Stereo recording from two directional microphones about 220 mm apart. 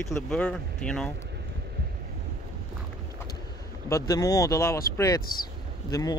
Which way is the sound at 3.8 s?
15° left (ahead or behind).